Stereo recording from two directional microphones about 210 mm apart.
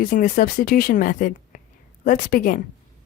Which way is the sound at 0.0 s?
40° left (ahead or behind).